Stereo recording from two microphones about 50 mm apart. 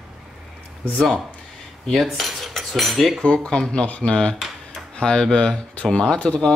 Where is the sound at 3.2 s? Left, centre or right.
Centre.